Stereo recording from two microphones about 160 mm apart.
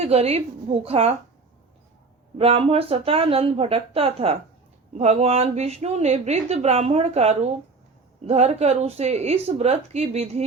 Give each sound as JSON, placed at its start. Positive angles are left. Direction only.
{"t": 0.0, "sound": "a woman's voice", "side_deg": -40}
{"t": 2.4, "sound": "a woman's voice", "side_deg": -35}